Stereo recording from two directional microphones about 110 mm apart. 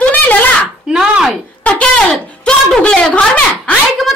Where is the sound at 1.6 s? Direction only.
10° left (ahead or behind).